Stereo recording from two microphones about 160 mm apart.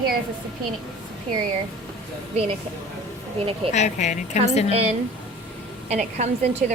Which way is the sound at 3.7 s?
45° left (ahead or behind).